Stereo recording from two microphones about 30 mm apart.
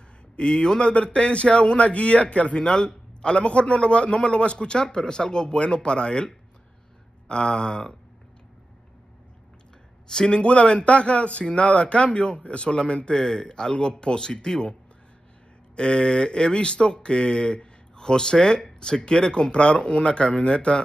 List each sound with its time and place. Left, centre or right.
0.4 s a man's voice: left
2.5 s a man's voice: left
10.0 s speech: left
10.4 s a man's voice: left
13.1 s speech: left
15.7 s a man's voice: left